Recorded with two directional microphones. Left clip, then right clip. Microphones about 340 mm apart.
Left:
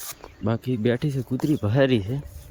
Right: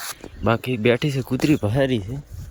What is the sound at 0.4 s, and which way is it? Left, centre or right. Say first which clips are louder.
Speech: right 6 dB; centre.